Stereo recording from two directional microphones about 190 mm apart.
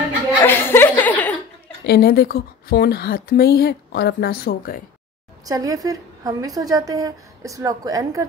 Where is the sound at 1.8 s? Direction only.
55° left (ahead or behind).